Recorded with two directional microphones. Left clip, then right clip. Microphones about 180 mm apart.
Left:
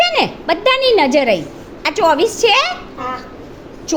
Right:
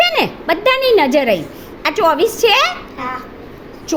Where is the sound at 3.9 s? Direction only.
5° right (ahead or behind).